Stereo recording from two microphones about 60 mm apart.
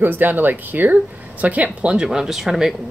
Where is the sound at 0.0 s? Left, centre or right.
Right; by 2.0 s centre.